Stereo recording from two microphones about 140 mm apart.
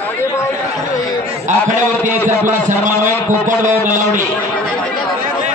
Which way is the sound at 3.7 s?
65° right (ahead or behind).